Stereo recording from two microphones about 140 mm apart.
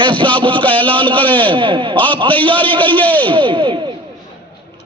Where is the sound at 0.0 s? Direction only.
35° right (ahead or behind).